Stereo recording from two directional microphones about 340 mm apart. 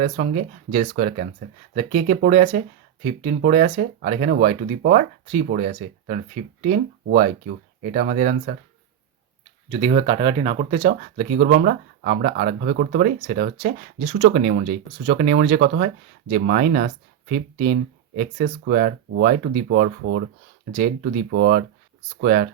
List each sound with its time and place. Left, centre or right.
0.0 s speech: centre
9.6 s speech: centre
20.7 s speech: right